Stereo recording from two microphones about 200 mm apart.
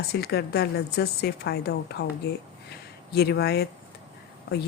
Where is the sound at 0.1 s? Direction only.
55° left (ahead or behind).